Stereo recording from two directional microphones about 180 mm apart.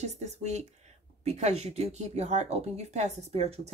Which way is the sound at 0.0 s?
40° right (ahead or behind).